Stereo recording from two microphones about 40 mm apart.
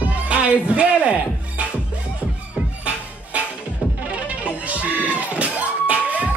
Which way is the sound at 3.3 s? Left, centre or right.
Right.